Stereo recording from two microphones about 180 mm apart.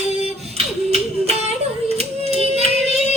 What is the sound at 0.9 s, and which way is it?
Music, 35° right (ahead or behind).